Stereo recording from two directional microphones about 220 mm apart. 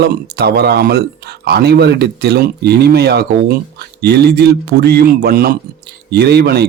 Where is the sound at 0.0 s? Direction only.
45° right (ahead or behind).